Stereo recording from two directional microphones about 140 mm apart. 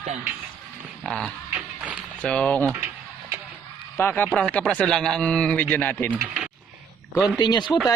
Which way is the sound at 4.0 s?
15° left (ahead or behind).